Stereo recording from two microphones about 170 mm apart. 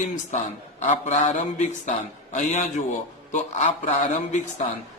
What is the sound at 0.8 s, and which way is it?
A man's voice, 45° left (ahead or behind).